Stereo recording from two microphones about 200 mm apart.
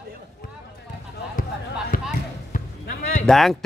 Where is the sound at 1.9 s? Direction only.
45° left (ahead or behind).